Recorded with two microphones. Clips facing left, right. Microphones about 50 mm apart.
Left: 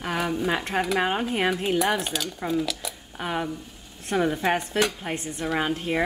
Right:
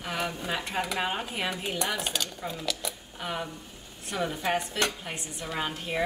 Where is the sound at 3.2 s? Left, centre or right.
Left.